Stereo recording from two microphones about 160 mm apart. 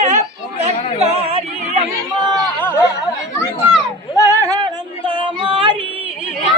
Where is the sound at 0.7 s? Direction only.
40° right (ahead or behind).